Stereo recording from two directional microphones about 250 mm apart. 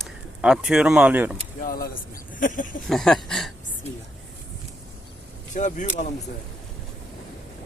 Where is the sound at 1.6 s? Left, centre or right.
Left.